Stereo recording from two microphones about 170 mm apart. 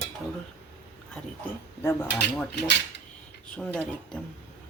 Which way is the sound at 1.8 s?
10° left (ahead or behind).